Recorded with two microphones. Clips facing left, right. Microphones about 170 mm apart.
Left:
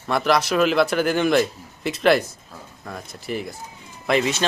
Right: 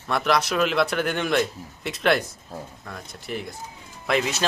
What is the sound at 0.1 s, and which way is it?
Speech, centre (ahead or behind).